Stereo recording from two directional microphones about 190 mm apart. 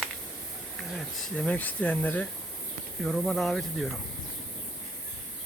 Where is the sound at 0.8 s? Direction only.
Centre (ahead or behind).